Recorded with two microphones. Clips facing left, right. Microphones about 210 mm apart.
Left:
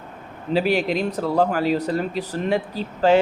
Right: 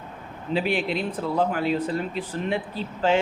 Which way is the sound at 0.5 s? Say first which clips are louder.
Left 4 dB; 40° left (ahead or behind).